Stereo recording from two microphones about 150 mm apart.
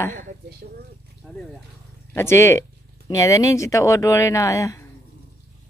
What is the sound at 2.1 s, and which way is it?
Speech, 15° left (ahead or behind).